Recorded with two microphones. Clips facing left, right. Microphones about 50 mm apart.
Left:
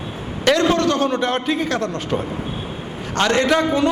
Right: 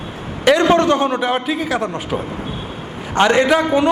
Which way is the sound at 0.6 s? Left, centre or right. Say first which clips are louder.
Right 4 dB; right.